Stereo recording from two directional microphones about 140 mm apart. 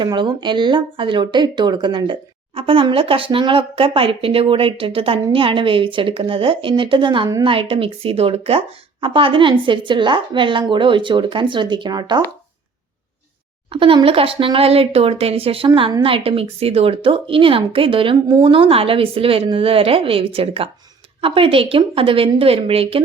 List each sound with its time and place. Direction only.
0.0 s speech: 35° right (ahead or behind)
13.7 s speech: 40° right (ahead or behind)